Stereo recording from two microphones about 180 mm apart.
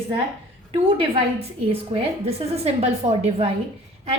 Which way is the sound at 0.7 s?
35° right (ahead or behind).